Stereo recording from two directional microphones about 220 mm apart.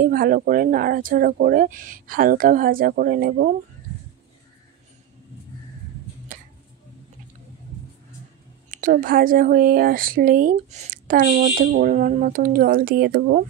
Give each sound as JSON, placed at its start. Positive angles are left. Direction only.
{"t": 0.0, "sound": "speech", "side_deg": -40}
{"t": 8.6, "sound": "speech", "side_deg": -40}